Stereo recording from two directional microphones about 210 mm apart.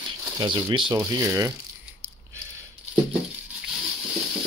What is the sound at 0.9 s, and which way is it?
Speech, 15° right (ahead or behind).